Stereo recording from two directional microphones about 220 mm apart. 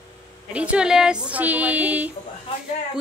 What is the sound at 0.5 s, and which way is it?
A woman's voice, 5° right (ahead or behind).